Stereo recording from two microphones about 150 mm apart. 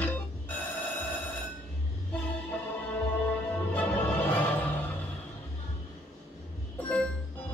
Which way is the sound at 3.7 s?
10° left (ahead or behind).